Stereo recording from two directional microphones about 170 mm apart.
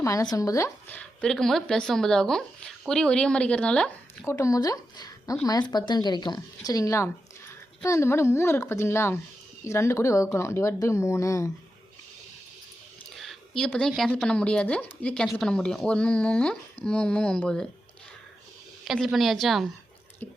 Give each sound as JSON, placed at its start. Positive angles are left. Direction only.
{"t": 0.0, "sound": "speech", "side_deg": 20}
{"t": 13.1, "sound": "speech", "side_deg": 0}
{"t": 18.9, "sound": "speech", "side_deg": 0}